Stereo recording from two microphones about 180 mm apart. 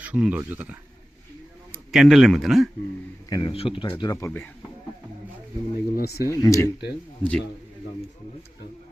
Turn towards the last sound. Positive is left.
turn(degrees=5)  # may be behind; listen again after turning